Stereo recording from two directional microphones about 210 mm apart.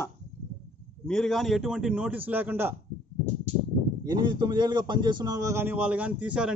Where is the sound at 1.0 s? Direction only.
Centre (ahead or behind).